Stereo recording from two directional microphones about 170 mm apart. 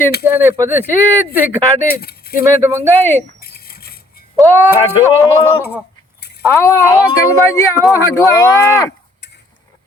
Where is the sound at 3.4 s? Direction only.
65° left (ahead or behind).